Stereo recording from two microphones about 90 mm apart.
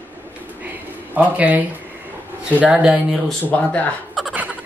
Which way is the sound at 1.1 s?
15° right (ahead or behind).